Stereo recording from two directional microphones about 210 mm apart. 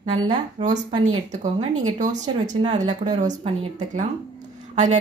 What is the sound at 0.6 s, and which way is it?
Speech, 25° right (ahead or behind).